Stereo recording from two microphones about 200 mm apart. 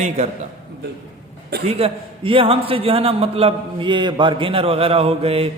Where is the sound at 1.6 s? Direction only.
30° right (ahead or behind).